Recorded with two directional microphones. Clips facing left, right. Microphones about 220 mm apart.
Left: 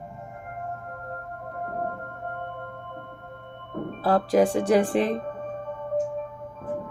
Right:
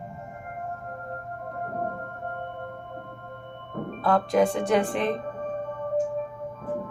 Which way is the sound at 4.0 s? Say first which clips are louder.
Left 1 dB; 30° left (ahead or behind).